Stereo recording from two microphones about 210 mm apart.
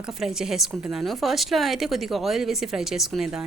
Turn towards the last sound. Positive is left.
turn(degrees=0)  # may be behind; listen again after turning